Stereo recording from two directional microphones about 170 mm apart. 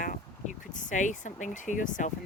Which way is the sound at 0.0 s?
50° left (ahead or behind).